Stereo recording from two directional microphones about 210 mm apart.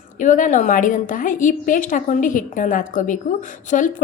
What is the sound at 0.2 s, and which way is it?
A woman's voice, 40° left (ahead or behind).